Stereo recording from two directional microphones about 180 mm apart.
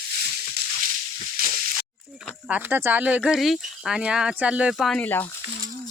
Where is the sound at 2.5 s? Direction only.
10° right (ahead or behind); by 5.3 s 10° left (ahead or behind).